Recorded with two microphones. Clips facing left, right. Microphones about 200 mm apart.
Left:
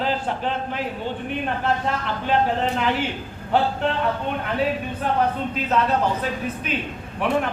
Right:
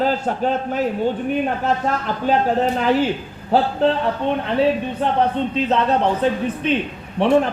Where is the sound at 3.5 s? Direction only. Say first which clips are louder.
Right 3 dB; 35° right (ahead or behind).